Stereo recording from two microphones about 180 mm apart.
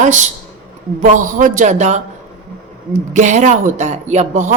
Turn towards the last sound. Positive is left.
turn(degrees=-40)  # may be behind; listen again after turning